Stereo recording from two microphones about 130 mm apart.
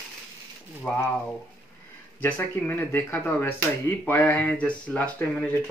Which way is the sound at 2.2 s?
10° left (ahead or behind).